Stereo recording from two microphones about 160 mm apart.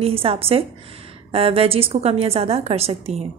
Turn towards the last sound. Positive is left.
turn(degrees=-40)  # may be behind; listen again after turning